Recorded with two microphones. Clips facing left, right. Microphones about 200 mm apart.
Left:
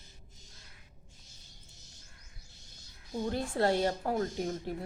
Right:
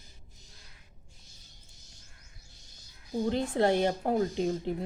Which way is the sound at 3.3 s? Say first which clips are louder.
Right 3 dB; 20° right (ahead or behind).